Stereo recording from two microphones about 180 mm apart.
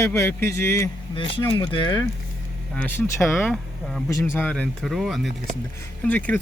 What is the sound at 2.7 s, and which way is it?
Speech, 10° left (ahead or behind).